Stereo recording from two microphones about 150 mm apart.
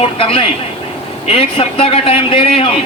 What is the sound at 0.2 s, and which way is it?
A man's voice, 35° left (ahead or behind).